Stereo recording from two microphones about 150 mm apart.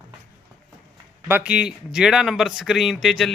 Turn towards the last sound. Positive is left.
turn(degrees=0)  # may be behind; listen again after turning